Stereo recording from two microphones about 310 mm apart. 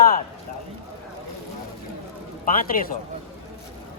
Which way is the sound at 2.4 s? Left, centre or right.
Left.